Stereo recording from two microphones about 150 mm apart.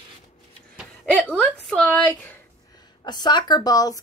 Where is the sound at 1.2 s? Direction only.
5° left (ahead or behind).